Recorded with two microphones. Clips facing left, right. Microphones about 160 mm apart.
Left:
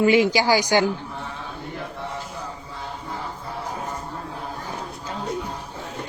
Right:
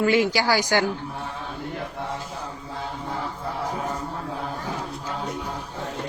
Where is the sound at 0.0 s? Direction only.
15° left (ahead or behind).